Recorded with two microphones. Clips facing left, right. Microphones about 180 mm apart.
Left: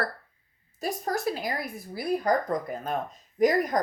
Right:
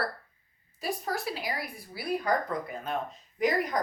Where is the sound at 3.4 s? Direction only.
45° left (ahead or behind).